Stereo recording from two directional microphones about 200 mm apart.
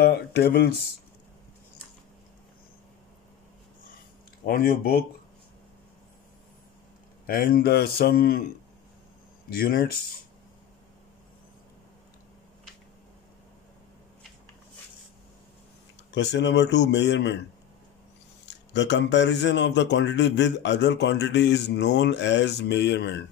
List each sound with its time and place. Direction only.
0.0 s speech: 50° left (ahead or behind)
4.5 s a man's voice: 50° left (ahead or behind)
7.2 s a man's voice: 50° left (ahead or behind)
9.6 s a man's voice: 50° left (ahead or behind)
16.1 s speech: 60° left (ahead or behind)
18.4 s speech: 60° left (ahead or behind)